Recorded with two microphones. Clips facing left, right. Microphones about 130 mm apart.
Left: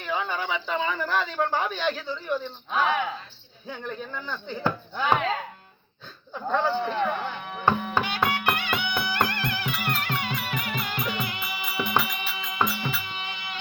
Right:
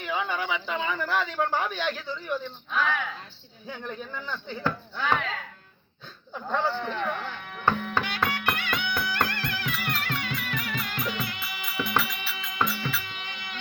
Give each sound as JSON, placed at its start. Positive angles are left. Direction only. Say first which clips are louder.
{"t": 0.0, "sound": "speech", "louder": "left 1 dB", "side_deg": -10}
{"t": 2.6, "sound": "speech", "louder": "left 4 dB", "side_deg": 20}
{"t": 3.8, "sound": "speech", "louder": "left 2 dB", "side_deg": -5}
{"t": 4.6, "sound": "speech", "louder": "left 3 dB", "side_deg": 20}
{"t": 6.6, "sound": "music", "louder": "left 4 dB", "side_deg": 15}